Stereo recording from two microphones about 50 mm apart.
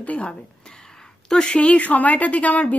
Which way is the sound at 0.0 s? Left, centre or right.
Left.